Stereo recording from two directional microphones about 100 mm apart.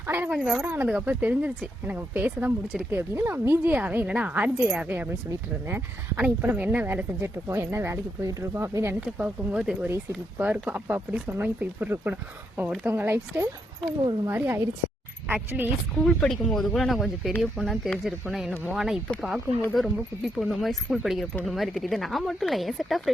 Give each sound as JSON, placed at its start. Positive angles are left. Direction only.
{"t": 0.0, "sound": "a woman's voice", "side_deg": -15}
{"t": 0.3, "sound": "speech", "side_deg": -5}
{"t": 0.6, "sound": "a woman's voice", "side_deg": -20}
{"t": 9.0, "sound": "a woman's voice", "side_deg": -15}
{"t": 16.0, "sound": "speech", "side_deg": 5}